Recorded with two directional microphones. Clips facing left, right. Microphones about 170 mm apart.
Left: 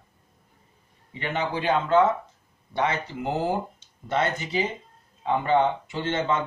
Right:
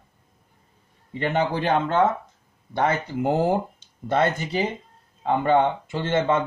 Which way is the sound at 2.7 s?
50° right (ahead or behind).